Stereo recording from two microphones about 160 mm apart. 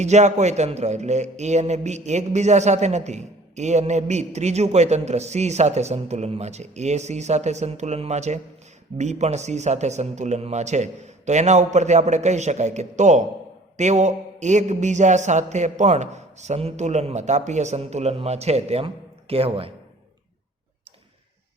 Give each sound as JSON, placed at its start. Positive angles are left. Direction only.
{"t": 0.0, "sound": "a man's voice", "side_deg": -45}